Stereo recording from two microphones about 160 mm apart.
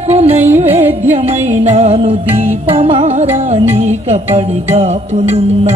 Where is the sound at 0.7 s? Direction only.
15° right (ahead or behind).